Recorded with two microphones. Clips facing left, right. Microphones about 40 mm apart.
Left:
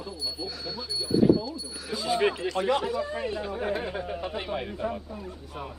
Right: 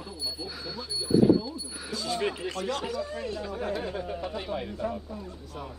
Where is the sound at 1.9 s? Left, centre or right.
Centre.